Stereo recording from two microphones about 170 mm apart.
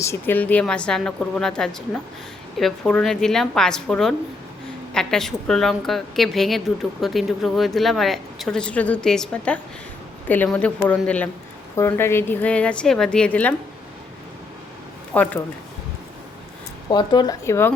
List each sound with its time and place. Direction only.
0.0 s a woman's voice: 15° left (ahead or behind)
15.1 s a woman's voice: 10° left (ahead or behind)
16.9 s speech: 25° left (ahead or behind)